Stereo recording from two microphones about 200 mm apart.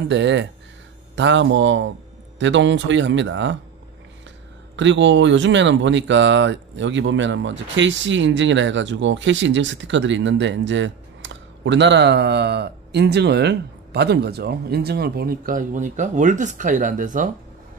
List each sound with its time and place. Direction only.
0.1 s speech: 60° right (ahead or behind)
4.7 s speech: 65° right (ahead or behind); by 17.3 s 40° right (ahead or behind)